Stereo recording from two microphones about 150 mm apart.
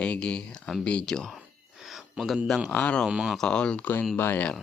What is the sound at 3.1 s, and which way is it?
Speech, 5° right (ahead or behind).